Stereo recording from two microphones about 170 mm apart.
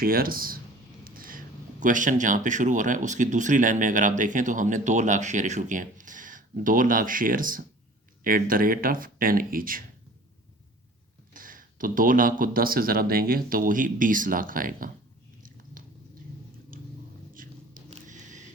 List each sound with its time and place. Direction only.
0.0 s speech: 60° right (ahead or behind)
1.0 s a sound: 55° right (ahead or behind)
1.8 s speech: 50° right (ahead or behind)
11.3 s speech: 55° right (ahead or behind)
16.7 s vehicle: 55° right (ahead or behind)
17.3 s biting: 55° right (ahead or behind)
17.9 s a sound: 45° right (ahead or behind)